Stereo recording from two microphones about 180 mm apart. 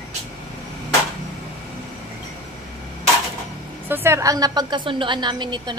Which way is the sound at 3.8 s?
15° right (ahead or behind).